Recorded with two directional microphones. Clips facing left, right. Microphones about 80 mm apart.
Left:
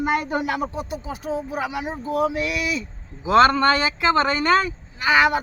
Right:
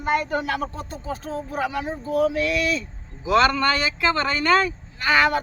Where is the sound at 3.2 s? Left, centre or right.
Left.